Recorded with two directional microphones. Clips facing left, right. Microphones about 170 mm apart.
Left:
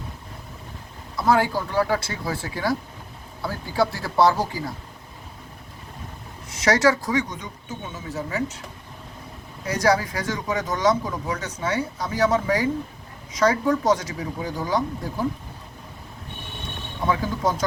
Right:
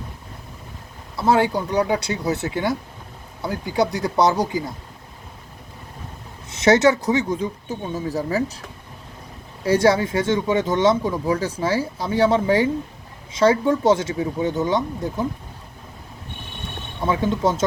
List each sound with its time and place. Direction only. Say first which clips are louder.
1.1 s speech: right 2 dB; 25° right (ahead or behind)
6.5 s speech: right 4 dB; 25° right (ahead or behind)
9.6 s speech: right 4 dB; 25° right (ahead or behind)
17.1 s speech: right 3 dB; 25° right (ahead or behind)